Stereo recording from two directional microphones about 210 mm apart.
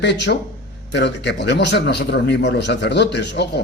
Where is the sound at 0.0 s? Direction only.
55° left (ahead or behind).